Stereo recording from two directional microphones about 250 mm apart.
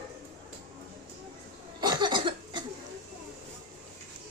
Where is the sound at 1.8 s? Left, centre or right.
Centre.